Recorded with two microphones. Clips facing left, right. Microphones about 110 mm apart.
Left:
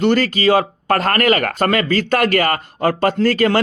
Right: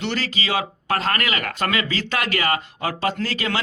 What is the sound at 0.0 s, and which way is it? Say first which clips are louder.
Speech: left 11 dB; 50° left (ahead or behind).